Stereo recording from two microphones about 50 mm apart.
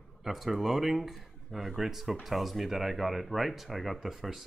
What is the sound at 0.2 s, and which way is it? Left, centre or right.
Speech, centre.